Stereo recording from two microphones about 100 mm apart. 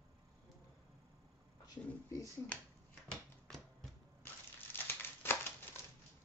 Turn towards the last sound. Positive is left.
turn(degrees=20)  # may be behind; listen again after turning